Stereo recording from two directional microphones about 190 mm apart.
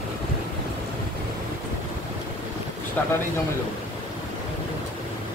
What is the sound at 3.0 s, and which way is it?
Speech, 10° left (ahead or behind).